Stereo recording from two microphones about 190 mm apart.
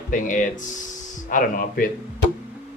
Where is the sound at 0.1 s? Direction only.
45° left (ahead or behind).